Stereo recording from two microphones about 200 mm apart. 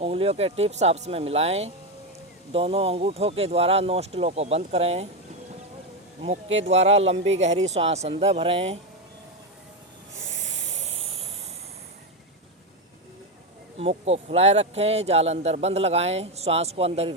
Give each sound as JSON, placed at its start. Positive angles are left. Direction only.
{"t": 0.0, "sound": "speech", "side_deg": -30}
{"t": 6.2, "sound": "speech", "side_deg": -30}
{"t": 10.2, "sound": "a sound", "side_deg": -65}
{"t": 10.7, "sound": "hiss", "side_deg": -30}
{"t": 13.7, "sound": "speech", "side_deg": -30}